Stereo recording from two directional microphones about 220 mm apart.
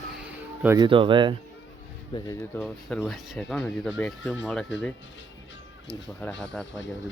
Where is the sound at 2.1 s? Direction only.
20° left (ahead or behind).